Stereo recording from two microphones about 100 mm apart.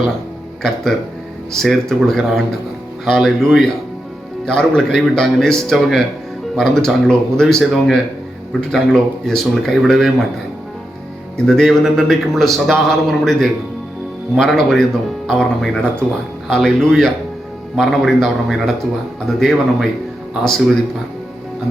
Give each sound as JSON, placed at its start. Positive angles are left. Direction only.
{"t": 1.5, "sound": "a man's voice", "side_deg": 0}
{"t": 11.3, "sound": "a man's voice", "side_deg": 5}